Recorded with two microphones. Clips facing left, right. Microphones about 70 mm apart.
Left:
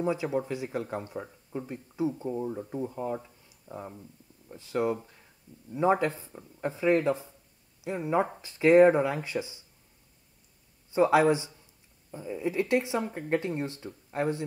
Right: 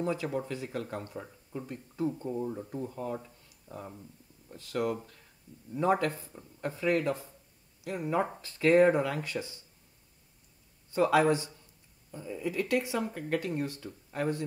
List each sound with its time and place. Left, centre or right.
0.0 s speech: centre
3.4 s a sound: centre
4.5 s speech: centre
10.9 s speech: left